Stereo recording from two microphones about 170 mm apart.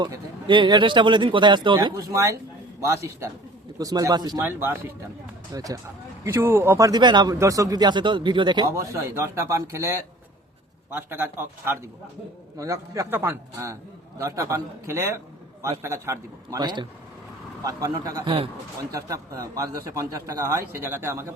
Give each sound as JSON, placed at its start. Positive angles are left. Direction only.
{"t": 0.0, "sound": "a man's voice", "side_deg": -30}
{"t": 4.4, "sound": "a man's voice", "side_deg": -15}